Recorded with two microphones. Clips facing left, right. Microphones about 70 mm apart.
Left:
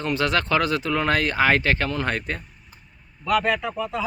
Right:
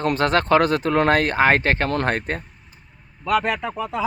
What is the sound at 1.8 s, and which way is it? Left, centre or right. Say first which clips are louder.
Speech: right 4 dB; right.